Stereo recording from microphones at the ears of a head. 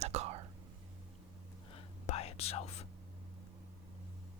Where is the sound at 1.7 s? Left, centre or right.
Left.